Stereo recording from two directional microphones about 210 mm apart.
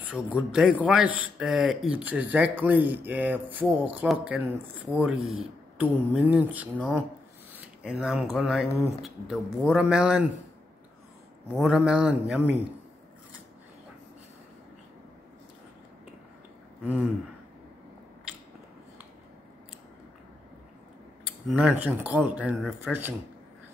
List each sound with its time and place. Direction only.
0.1 s speech: centre (ahead or behind)
11.5 s speech: centre (ahead or behind)
16.8 s speech: 10° right (ahead or behind)
21.5 s speech: 5° right (ahead or behind)